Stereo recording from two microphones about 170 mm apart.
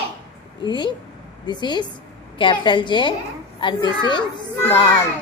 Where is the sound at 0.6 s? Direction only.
25° left (ahead or behind).